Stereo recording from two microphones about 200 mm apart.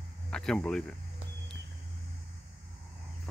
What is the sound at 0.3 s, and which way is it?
Speech, 5° left (ahead or behind).